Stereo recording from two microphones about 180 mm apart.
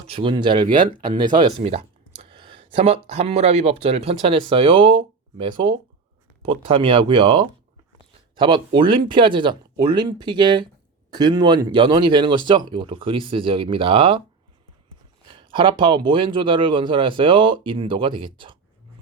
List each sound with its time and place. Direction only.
0.1 s speech: 30° right (ahead or behind)
15.3 s speech: 30° right (ahead or behind)